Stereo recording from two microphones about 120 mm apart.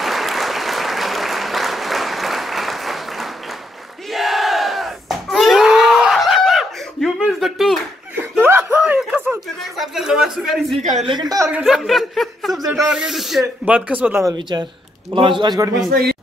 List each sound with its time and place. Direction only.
0.0 s applause: centre (ahead or behind)
4.1 s battle cry: centre (ahead or behind)
8.4 s a sound: 15° right (ahead or behind)
9.6 s a sound: centre (ahead or behind)
10.8 s a woman's voice: 75° right (ahead or behind)
11.1 s a man's voice: 35° right (ahead or behind)
11.6 s speech: centre (ahead or behind)
14.3 s a man's voice: 40° right (ahead or behind)